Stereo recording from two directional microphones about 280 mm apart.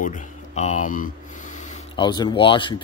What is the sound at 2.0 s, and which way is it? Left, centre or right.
Speech, centre.